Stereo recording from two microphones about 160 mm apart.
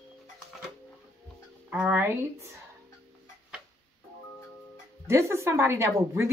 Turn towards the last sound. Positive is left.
turn(degrees=-15)  # may be behind; listen again after turning